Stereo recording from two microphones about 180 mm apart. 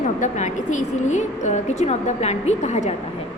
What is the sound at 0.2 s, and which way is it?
A woman's voice, 40° left (ahead or behind).